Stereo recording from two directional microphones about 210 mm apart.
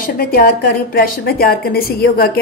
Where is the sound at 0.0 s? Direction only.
45° left (ahead or behind).